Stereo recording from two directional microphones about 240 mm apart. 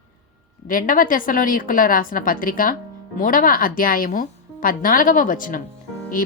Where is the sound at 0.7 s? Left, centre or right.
Left.